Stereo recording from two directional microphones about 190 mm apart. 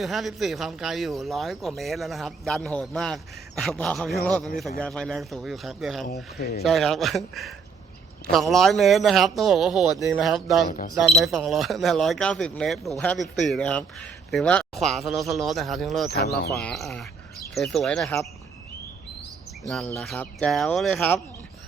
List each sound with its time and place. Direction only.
0.0 s speech: centre (ahead or behind)
16.0 s speech: 55° left (ahead or behind)
16.6 s speech: centre (ahead or behind)
19.6 s speech: centre (ahead or behind)